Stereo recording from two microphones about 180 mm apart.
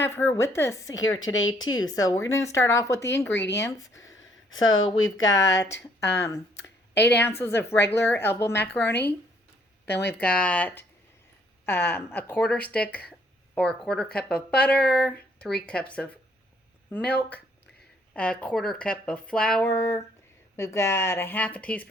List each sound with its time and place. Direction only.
0.0 s speech: 15° left (ahead or behind)
1.3 s speech: 90° left
1.8 s speech: 20° left (ahead or behind)
4.0 s a sound: 90° left
4.9 s speech: 90° left
5.7 s speech: 15° left (ahead or behind)
10.1 s speech: 10° left (ahead or behind)
20.6 s speech: 15° left (ahead or behind)